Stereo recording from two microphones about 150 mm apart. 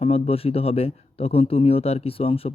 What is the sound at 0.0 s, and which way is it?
A man's voice, 40° left (ahead or behind).